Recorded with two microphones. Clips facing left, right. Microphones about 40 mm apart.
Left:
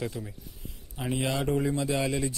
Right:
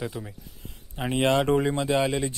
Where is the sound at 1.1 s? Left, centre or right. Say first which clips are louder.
Right 7 dB; right.